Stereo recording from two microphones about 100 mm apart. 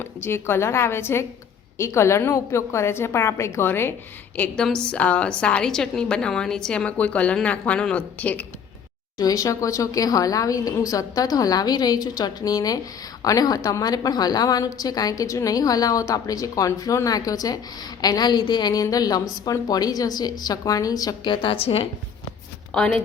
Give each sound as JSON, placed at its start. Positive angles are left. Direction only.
{"t": 0.0, "sound": "a woman's voice", "side_deg": 25}
{"t": 4.4, "sound": "a woman's voice", "side_deg": 10}
{"t": 9.1, "sound": "a woman's voice", "side_deg": 35}
{"t": 21.2, "sound": "a woman's voice", "side_deg": 60}
{"t": 22.7, "sound": "speech", "side_deg": 10}